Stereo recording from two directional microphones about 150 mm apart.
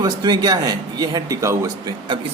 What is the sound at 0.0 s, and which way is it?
A man's voice, 25° right (ahead or behind).